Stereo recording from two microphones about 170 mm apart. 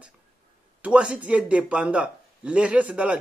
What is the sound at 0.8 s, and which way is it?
Speech, 5° right (ahead or behind).